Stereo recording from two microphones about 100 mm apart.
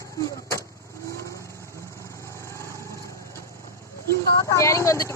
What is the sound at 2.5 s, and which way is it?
Vehicle, 30° left (ahead or behind).